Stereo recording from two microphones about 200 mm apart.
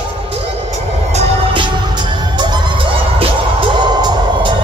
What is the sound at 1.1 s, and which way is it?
Music, 30° right (ahead or behind).